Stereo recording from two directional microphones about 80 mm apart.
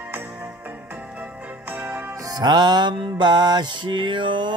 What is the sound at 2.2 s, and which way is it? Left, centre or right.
Music, right.